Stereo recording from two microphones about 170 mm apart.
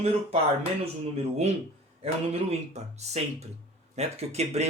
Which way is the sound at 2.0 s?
40° right (ahead or behind).